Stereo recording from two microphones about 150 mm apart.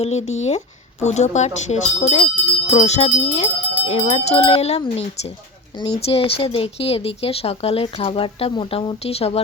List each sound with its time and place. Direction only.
0.0 s speech: 45° left (ahead or behind)